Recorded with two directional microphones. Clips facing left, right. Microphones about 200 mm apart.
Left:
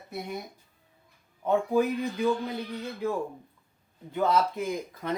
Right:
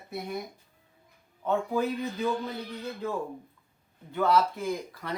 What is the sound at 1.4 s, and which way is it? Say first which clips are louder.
Speech: left 3 dB; 15° left (ahead or behind).